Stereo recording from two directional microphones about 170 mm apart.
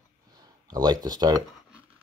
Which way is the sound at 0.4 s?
20° right (ahead or behind).